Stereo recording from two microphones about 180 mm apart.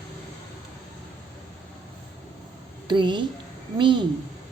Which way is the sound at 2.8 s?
25° right (ahead or behind).